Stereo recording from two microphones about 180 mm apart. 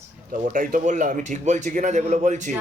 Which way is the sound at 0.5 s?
50° right (ahead or behind).